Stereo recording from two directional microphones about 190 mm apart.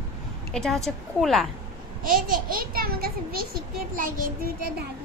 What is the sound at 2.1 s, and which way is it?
A child's voice, 45° right (ahead or behind).